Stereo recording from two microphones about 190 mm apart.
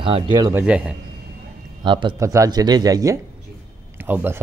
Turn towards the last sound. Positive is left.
turn(degrees=-10)  # may be behind; listen again after turning